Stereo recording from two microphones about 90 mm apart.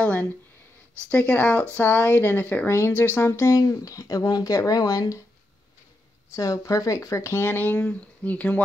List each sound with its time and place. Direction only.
0.0 s a sound: 15° left (ahead or behind)
1.1 s speech: 15° left (ahead or behind); by 5.2 s 40° left (ahead or behind)
6.3 s speech: 40° left (ahead or behind); by 8.6 s 15° left (ahead or behind)